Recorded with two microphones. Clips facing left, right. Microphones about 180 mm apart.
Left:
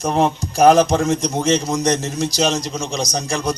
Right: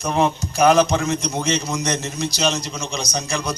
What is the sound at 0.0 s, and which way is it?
A man's voice, 40° left (ahead or behind).